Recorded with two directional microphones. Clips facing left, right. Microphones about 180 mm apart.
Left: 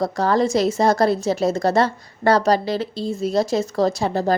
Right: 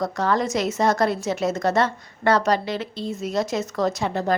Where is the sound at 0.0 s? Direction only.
35° left (ahead or behind).